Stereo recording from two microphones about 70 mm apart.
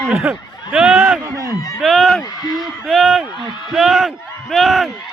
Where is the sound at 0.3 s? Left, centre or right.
Centre.